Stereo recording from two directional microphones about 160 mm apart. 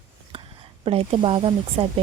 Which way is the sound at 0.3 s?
35° right (ahead or behind).